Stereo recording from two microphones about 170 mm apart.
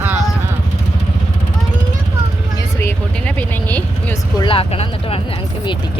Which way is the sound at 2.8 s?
10° left (ahead or behind).